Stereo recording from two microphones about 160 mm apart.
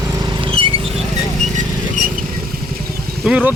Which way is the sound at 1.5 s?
55° right (ahead or behind).